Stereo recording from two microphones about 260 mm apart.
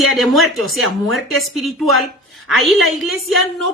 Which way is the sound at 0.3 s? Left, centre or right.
Centre.